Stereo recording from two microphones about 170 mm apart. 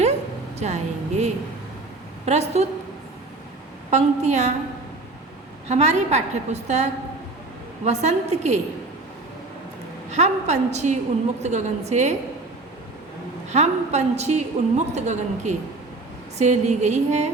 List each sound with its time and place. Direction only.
0.6 s a woman's voice: 40° right (ahead or behind)
3.8 s a woman's voice: 40° right (ahead or behind)
5.6 s a woman's voice: 40° right (ahead or behind)
7.9 s a woman's voice: 40° right (ahead or behind)
10.1 s a woman's voice: 40° right (ahead or behind)
13.5 s a woman's voice: 40° right (ahead or behind)